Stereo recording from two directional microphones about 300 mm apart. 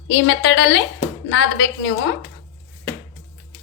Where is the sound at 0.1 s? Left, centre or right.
Left.